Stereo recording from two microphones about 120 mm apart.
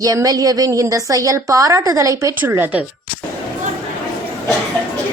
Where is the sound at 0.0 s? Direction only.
30° right (ahead or behind).